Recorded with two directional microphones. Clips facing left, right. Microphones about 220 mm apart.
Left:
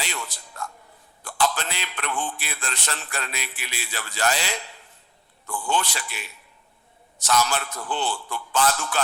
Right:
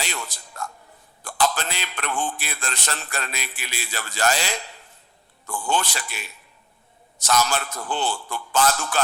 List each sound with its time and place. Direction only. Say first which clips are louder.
0.0 s music: right 1 dB; 45° right (ahead or behind)
1.2 s a man's voice: right 1 dB; 45° right (ahead or behind)